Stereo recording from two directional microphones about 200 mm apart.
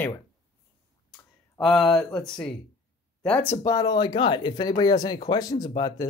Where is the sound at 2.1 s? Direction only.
5° left (ahead or behind).